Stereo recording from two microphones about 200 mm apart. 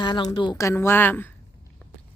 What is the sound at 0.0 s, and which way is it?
A woman's voice, 20° left (ahead or behind).